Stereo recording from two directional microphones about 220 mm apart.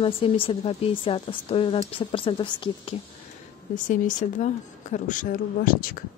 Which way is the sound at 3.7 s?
35° left (ahead or behind).